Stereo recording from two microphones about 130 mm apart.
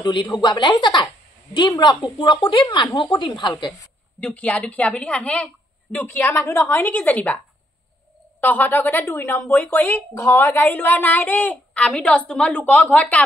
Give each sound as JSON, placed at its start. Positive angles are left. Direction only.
{"t": 0.0, "sound": "speech", "side_deg": 35}
{"t": 4.2, "sound": "speech", "side_deg": 10}